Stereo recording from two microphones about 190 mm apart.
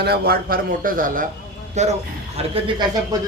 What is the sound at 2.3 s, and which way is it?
Speech, 25° right (ahead or behind).